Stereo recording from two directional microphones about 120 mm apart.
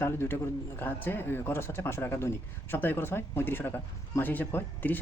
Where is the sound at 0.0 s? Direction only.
20° left (ahead or behind).